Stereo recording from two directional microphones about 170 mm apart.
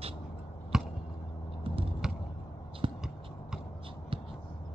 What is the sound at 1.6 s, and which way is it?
Computer keyboard, 35° right (ahead or behind).